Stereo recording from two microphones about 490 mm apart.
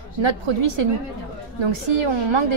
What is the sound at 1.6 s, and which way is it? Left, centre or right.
Speech, right.